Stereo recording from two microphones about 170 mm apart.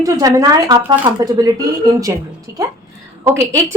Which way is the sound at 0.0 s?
20° right (ahead or behind).